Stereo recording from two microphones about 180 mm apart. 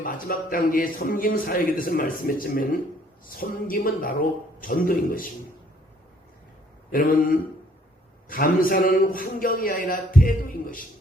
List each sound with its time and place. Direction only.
0.0 s a man's voice: 50° left (ahead or behind)
6.9 s a man's voice: 50° left (ahead or behind)